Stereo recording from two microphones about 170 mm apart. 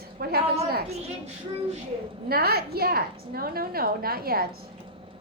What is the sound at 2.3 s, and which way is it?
A woman's voice, 65° right (ahead or behind).